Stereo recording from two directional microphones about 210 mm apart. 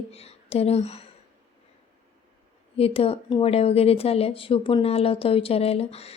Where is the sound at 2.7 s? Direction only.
30° left (ahead or behind).